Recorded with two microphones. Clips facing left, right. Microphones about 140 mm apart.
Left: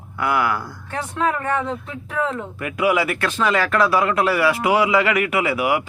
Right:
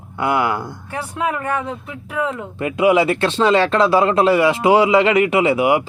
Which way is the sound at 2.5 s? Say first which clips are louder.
Right 6 dB; 25° right (ahead or behind).